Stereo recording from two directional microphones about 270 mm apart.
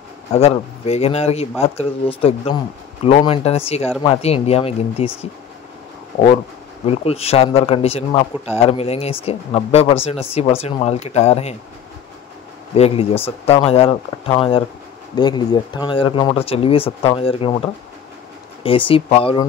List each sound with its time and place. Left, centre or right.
0.3 s speech: left
6.9 s speech: left
12.7 s speech: left